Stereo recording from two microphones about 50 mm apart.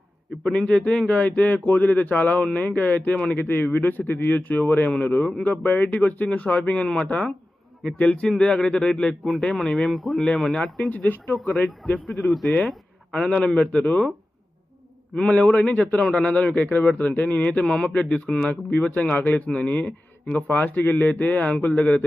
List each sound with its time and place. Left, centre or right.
0.5 s a man's voice: left
6.8 s a man's voice: centre
9.6 s a man's voice: centre
10.8 s speech: left
11.3 s a man's voice: centre
12.5 s a sound: left
13.1 s a man's voice: left
15.1 s a man's voice: left
16.0 s speech: centre
16.3 s speech: left
17.7 s a man's voice: centre
18.4 s a man's voice: left
20.2 s speech: centre
20.6 s speech: left